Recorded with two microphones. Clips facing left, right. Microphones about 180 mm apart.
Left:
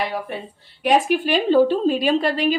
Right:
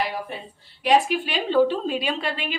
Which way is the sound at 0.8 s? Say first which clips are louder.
Left 2 dB; 45° left (ahead or behind).